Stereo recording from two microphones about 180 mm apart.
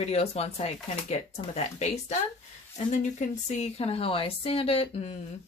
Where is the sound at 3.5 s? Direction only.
35° left (ahead or behind).